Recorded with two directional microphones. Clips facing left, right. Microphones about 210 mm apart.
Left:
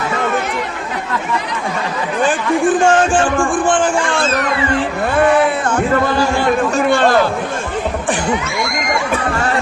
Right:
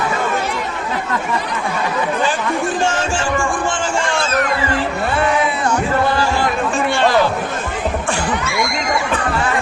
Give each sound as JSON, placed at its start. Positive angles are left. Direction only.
{"t": 2.8, "sound": "speech", "side_deg": 50}
{"t": 5.1, "sound": "music", "side_deg": 50}
{"t": 6.9, "sound": "chatter", "side_deg": 50}